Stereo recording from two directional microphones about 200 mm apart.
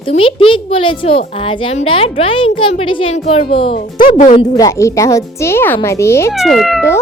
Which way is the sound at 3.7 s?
45° left (ahead or behind).